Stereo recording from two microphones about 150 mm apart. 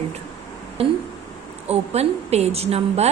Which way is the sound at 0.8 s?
40° right (ahead or behind).